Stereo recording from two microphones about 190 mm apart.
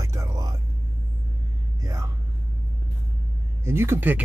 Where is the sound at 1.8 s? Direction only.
15° right (ahead or behind).